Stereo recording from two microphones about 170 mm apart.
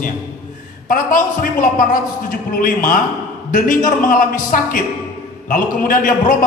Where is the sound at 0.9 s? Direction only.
55° left (ahead or behind).